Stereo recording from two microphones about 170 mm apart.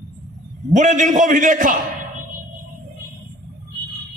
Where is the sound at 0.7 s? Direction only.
45° right (ahead or behind).